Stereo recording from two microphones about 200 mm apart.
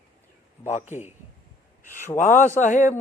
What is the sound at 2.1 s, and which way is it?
Speech, 40° left (ahead or behind).